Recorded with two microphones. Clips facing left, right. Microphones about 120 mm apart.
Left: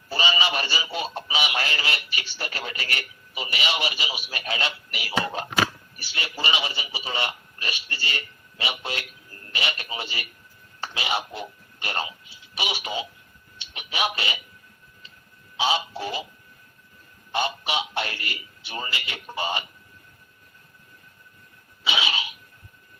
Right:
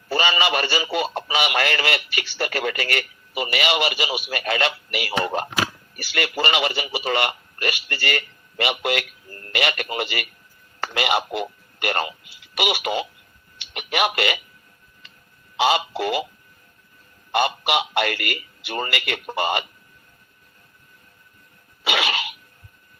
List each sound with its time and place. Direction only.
0.1 s speech: 60° right (ahead or behind)
6.0 s a man's voice: 75° right (ahead or behind)
15.5 s a man's voice: 65° right (ahead or behind)
17.3 s a man's voice: 65° right (ahead or behind)
21.8 s a sound: 65° right (ahead or behind)